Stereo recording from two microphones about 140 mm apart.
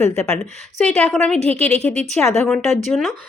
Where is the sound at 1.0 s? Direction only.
5° left (ahead or behind).